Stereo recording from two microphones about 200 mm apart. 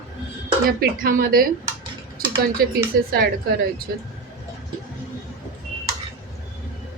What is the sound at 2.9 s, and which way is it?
Speech, 45° right (ahead or behind).